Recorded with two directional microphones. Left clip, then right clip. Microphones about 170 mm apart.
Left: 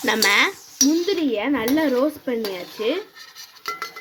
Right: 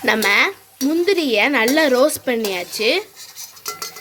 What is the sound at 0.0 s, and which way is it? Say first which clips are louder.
Speech: right 2 dB; 5° right (ahead or behind).